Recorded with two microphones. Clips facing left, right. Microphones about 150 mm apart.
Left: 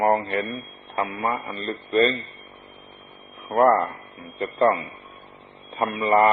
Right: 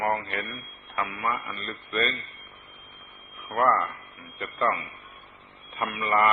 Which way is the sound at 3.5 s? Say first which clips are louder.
Left 6 dB; 35° left (ahead or behind).